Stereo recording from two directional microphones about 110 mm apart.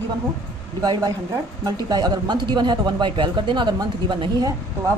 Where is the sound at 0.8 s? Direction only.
40° right (ahead or behind).